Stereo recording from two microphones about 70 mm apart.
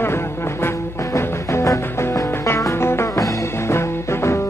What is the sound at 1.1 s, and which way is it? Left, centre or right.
Music, left.